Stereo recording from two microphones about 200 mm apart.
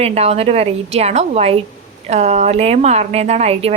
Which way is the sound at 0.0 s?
30° right (ahead or behind).